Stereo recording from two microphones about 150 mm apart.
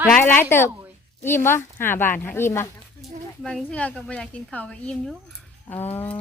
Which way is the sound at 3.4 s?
5° left (ahead or behind).